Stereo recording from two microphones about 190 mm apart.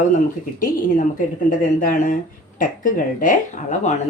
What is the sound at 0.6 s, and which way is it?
Speech, 45° left (ahead or behind).